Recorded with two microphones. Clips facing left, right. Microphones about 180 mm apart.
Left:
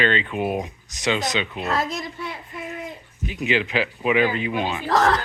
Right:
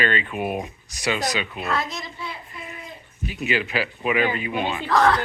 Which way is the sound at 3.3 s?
20° left (ahead or behind).